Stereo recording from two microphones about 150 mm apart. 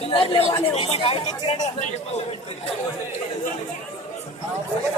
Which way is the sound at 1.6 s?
55° left (ahead or behind).